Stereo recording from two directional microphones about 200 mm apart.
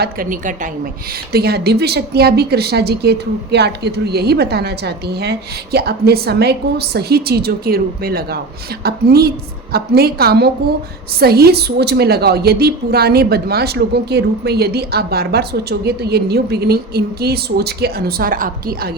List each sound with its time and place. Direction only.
0.0 s a woman's voice: 45° right (ahead or behind)
1.3 s a woman's voice: 50° right (ahead or behind)